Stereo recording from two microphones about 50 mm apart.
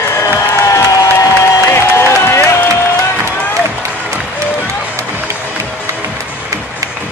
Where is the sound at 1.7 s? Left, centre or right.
Left.